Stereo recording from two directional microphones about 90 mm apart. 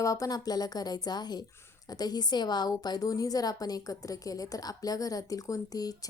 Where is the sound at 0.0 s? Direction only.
40° left (ahead or behind).